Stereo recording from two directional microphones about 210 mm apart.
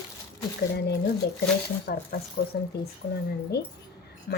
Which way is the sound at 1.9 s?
45° left (ahead or behind).